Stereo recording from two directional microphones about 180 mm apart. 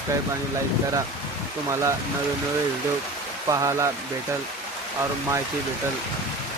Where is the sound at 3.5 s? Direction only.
20° right (ahead or behind).